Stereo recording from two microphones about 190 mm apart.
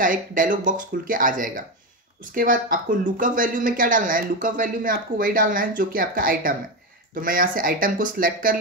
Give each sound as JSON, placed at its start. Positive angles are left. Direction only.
{"t": 0.0, "sound": "speech", "side_deg": -45}